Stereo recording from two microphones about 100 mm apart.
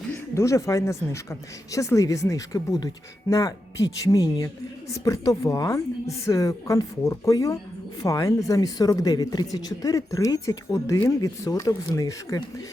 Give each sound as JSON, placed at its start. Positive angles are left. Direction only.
{"t": 0.1, "sound": "speech", "side_deg": 30}